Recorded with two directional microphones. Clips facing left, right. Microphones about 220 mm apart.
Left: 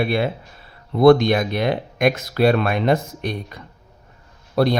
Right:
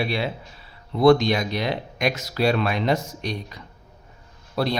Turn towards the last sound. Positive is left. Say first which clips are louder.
# left 6 dB
turn(degrees=50)  # may be behind; listen again after turning